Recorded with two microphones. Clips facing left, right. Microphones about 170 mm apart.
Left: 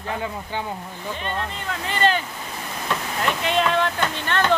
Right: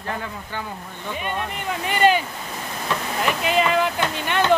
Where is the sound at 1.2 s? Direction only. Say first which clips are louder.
Right 2 dB; 15° right (ahead or behind).